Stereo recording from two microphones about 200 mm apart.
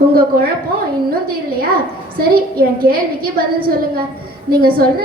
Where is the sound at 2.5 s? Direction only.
50° right (ahead or behind).